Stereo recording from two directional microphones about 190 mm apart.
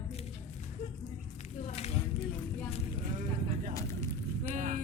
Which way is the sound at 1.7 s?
35° left (ahead or behind).